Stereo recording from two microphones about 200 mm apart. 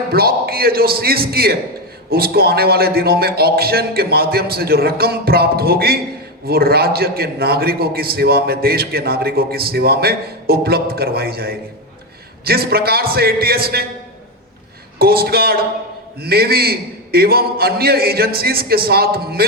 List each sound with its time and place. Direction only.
0.1 s a man's voice: 50° right (ahead or behind)
14.9 s a man's voice: 50° right (ahead or behind)